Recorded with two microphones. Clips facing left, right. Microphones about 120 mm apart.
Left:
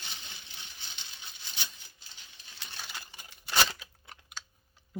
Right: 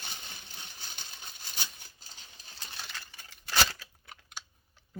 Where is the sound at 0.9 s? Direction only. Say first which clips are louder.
Right 2 dB; 45° right (ahead or behind).